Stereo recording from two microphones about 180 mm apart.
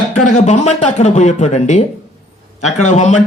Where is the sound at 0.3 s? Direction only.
40° left (ahead or behind).